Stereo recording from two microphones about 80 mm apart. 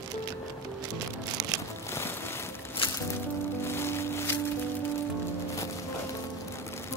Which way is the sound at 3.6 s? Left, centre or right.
Left.